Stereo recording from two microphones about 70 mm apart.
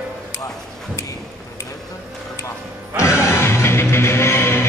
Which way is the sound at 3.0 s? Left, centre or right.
Left.